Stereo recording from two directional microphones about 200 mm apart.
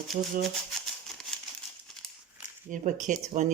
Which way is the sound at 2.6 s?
40° right (ahead or behind).